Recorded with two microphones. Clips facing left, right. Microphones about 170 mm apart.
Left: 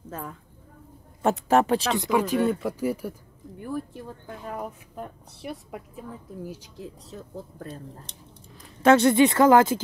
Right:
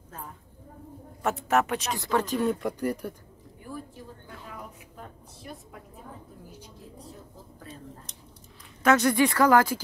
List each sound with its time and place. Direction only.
0.1 s a woman's voice: 90° left
1.5 s speech: 30° left (ahead or behind)
2.0 s speech: 10° left (ahead or behind)
3.6 s a sound: 60° left (ahead or behind)
4.5 s a sound: 50° left (ahead or behind)
5.4 s a woman's voice: 75° left (ahead or behind)
6.4 s speech: 90° left
7.5 s speech: 45° left (ahead or behind)
8.8 s speech: 25° left (ahead or behind)